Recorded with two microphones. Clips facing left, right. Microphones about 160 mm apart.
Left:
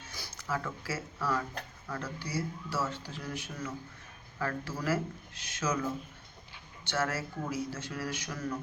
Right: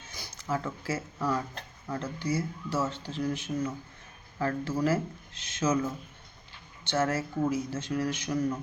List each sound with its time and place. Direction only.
0.1 s speech: 20° right (ahead or behind)
6.8 s speech: 25° right (ahead or behind)